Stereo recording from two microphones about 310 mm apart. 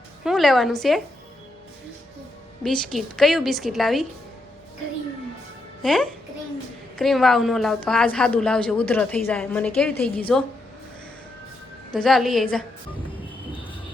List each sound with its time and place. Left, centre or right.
0.3 s a woman's voice: centre
2.6 s a woman's voice: centre
5.8 s a woman's voice: centre
11.9 s a woman's voice: centre